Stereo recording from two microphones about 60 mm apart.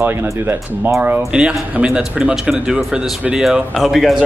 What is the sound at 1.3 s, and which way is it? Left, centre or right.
Speech, centre.